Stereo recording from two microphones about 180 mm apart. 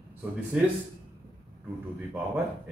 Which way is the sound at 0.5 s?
5° right (ahead or behind).